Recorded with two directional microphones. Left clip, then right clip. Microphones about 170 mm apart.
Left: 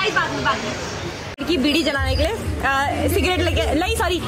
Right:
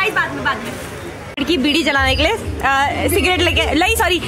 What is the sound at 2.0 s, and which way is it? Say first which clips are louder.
A woman's voice: right 7 dB; 20° right (ahead or behind).